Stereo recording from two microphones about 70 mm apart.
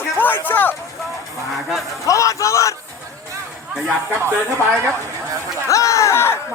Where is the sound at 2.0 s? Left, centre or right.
Left.